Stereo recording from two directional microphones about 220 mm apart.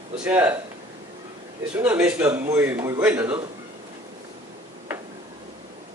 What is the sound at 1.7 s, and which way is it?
A man's voice, 5° right (ahead or behind).